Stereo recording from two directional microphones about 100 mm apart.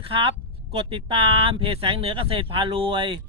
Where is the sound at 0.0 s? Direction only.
65° right (ahead or behind).